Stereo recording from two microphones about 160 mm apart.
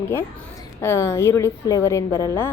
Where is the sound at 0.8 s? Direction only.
15° left (ahead or behind).